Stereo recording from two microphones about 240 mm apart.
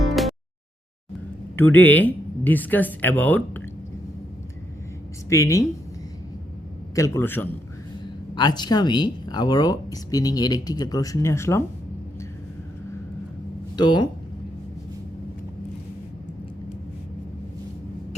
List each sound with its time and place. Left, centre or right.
1.5 s speech: centre
5.3 s speech: centre
6.9 s speech: centre
13.7 s speech: centre